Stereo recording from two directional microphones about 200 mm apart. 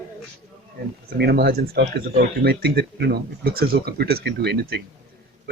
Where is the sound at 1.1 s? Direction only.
55° right (ahead or behind).